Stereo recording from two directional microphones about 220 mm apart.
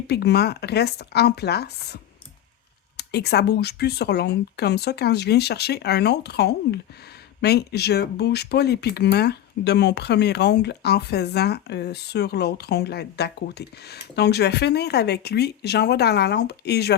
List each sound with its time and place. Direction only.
0.1 s speech: 45° left (ahead or behind)
3.0 s speech: 50° left (ahead or behind)